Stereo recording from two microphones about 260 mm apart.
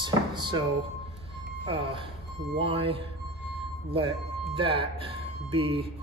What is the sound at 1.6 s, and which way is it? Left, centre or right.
Speech, centre.